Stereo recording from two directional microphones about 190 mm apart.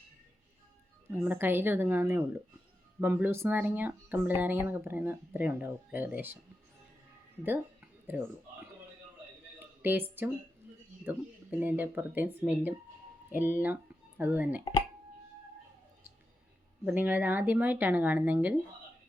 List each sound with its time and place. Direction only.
1.1 s speech: 10° right (ahead or behind)
7.4 s a sound: 10° right (ahead or behind)
9.6 s music: 10° right (ahead or behind)
11.1 s speech: 10° right (ahead or behind)
16.8 s speech: 10° right (ahead or behind)